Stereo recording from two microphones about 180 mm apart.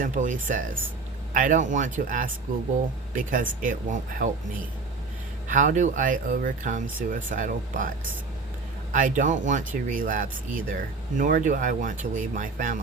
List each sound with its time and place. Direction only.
0.0 s speech: 45° right (ahead or behind)
5.5 s speech: 45° right (ahead or behind)